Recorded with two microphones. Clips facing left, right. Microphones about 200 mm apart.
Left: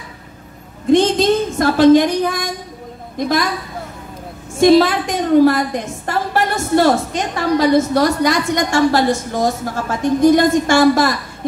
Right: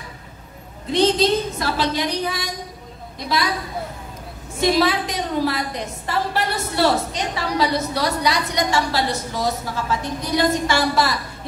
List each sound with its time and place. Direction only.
0.9 s a woman's voice: 50° left (ahead or behind)
4.7 s a woman's voice: 50° left (ahead or behind)